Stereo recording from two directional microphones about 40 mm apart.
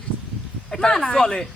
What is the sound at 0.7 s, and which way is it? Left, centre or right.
Speech, centre.